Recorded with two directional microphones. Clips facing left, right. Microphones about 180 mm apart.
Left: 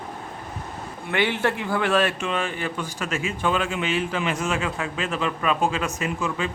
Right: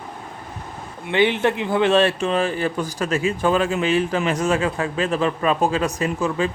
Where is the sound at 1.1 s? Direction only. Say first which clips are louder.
Right 5 dB; 20° right (ahead or behind).